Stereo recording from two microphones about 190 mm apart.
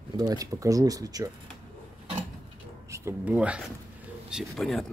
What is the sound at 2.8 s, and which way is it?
Speech, 15° right (ahead or behind).